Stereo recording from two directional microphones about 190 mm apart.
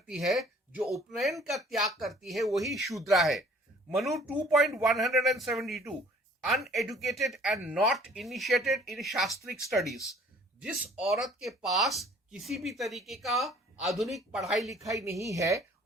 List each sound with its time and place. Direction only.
0.1 s speech: centre (ahead or behind)
14.7 s a woman's voice: 15° right (ahead or behind)